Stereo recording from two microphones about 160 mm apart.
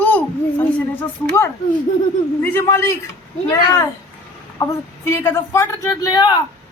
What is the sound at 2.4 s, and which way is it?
Speech, 15° left (ahead or behind).